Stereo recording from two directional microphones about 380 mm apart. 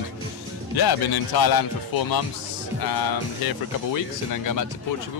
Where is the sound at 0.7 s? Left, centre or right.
Left.